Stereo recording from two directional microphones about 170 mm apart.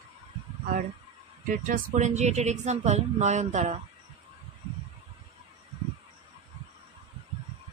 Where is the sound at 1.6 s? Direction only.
55° right (ahead or behind).